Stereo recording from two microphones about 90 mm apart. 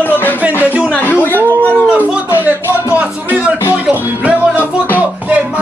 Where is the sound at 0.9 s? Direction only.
20° left (ahead or behind).